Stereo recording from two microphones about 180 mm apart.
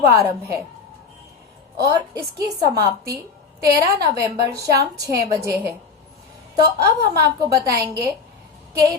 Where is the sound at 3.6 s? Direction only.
20° right (ahead or behind).